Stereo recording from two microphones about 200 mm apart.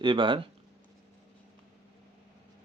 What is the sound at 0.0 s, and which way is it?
Speech, 25° right (ahead or behind).